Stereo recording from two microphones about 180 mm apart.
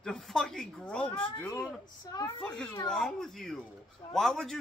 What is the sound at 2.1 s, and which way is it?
Speech, 20° left (ahead or behind).